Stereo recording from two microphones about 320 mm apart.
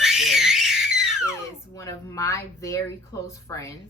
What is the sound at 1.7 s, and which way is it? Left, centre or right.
Speech, centre.